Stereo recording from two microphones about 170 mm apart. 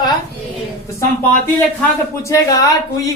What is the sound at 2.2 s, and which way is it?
Speech, 20° left (ahead or behind).